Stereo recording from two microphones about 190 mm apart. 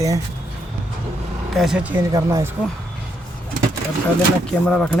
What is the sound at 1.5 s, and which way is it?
Speech, centre (ahead or behind).